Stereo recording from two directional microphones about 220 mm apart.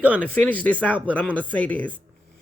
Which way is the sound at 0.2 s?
5° left (ahead or behind).